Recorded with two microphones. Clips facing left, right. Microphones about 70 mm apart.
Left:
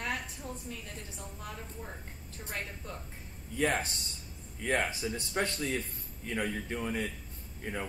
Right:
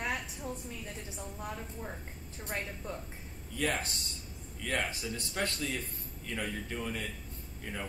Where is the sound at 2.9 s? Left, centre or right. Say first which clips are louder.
Right 3 dB; centre.